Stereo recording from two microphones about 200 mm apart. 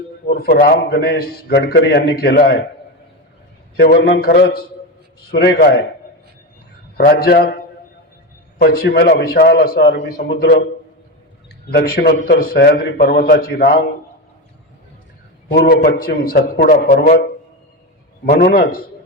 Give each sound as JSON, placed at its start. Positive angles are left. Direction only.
{"t": 0.3, "sound": "a man's voice", "side_deg": 50}
{"t": 3.8, "sound": "a man's voice", "side_deg": 55}
{"t": 6.9, "sound": "a man's voice", "side_deg": 50}
{"t": 11.7, "sound": "a man's voice", "side_deg": 50}
{"t": 15.5, "sound": "a man's voice", "side_deg": 50}
{"t": 18.3, "sound": "a man's voice", "side_deg": 50}